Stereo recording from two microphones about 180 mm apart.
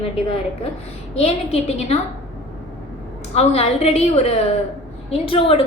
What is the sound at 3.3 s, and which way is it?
A woman's voice, 35° left (ahead or behind).